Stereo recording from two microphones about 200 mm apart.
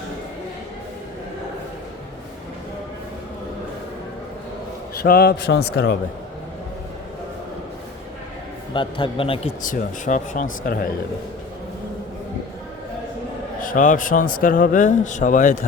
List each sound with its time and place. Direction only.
5.0 s a man's voice: 50° left (ahead or behind)
8.7 s a man's voice: 25° left (ahead or behind)
9.6 s speech: 40° left (ahead or behind)
13.6 s a man's voice: 40° left (ahead or behind)